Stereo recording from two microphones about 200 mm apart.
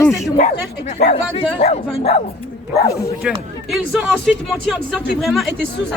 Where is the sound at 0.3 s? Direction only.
40° left (ahead or behind).